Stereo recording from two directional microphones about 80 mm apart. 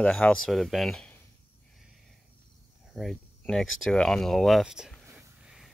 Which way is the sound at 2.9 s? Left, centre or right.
Centre.